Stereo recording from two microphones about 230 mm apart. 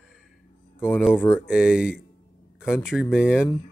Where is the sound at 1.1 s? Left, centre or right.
Centre.